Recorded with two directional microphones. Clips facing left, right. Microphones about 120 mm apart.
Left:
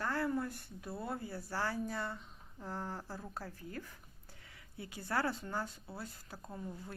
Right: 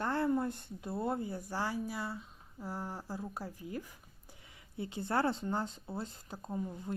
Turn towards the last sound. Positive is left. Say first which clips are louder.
# right 7 dB
turn(degrees=-20)  # may be behind; listen again after turning